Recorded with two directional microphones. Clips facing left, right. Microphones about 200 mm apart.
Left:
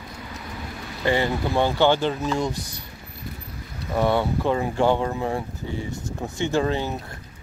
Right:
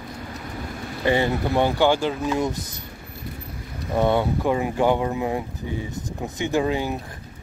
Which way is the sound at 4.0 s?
15° right (ahead or behind).